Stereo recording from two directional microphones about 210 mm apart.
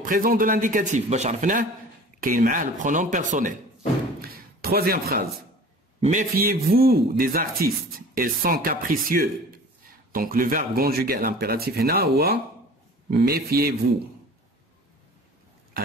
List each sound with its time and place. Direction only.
0.0 s a man's voice: 40° right (ahead or behind)
4.2 s a sound: 45° right (ahead or behind)
5.9 s a man's voice: 30° right (ahead or behind)
6.5 s speech: 45° right (ahead or behind)